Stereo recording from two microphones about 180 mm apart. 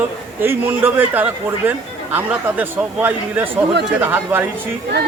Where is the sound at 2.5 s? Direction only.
10° right (ahead or behind).